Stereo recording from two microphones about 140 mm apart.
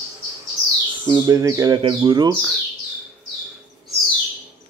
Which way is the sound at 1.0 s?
35° right (ahead or behind).